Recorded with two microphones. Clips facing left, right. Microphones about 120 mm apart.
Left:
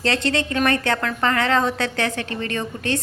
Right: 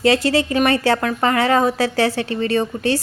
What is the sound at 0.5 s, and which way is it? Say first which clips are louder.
A woman's voice: right 3 dB; 15° right (ahead or behind).